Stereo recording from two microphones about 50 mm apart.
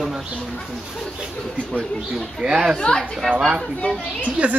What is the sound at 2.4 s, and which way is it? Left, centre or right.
Speech, right.